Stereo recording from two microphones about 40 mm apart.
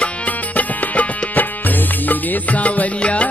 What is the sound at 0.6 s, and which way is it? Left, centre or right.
Music, left.